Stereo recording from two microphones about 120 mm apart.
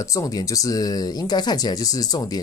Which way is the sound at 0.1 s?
30° left (ahead or behind).